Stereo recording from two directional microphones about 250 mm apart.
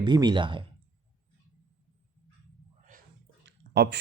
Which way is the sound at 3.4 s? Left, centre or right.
Right.